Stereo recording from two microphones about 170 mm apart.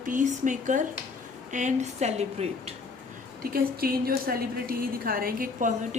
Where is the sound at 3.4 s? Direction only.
60° right (ahead or behind).